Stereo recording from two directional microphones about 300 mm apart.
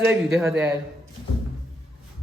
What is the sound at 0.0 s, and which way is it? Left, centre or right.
Speech, centre.